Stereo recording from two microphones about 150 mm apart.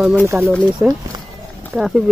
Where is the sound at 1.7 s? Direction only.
Centre (ahead or behind).